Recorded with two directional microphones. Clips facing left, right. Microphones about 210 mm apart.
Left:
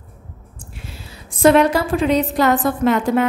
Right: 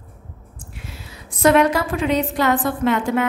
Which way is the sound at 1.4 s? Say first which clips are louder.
Left 2 dB; 30° left (ahead or behind).